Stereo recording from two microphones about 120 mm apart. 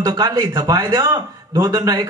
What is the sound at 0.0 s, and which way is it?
A man's voice, 30° right (ahead or behind).